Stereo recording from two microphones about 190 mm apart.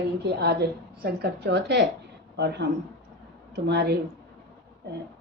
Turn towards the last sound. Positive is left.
turn(degrees=-60)  # may be behind; listen again after turning